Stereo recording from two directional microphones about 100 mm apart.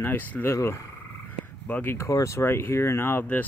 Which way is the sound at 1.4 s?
15° left (ahead or behind).